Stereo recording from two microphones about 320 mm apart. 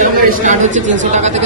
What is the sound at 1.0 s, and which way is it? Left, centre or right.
Speech, right.